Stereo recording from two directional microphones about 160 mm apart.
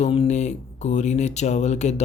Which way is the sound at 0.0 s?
40° left (ahead or behind).